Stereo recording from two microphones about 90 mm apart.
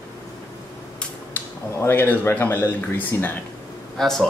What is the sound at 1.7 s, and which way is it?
Speech, 25° left (ahead or behind).